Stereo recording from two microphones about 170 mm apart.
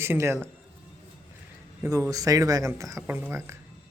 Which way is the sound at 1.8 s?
20° right (ahead or behind).